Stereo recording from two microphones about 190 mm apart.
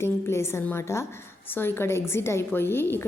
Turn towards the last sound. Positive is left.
turn(degrees=10)  # may be behind; listen again after turning